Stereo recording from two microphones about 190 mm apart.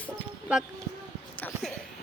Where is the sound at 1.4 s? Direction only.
10° left (ahead or behind).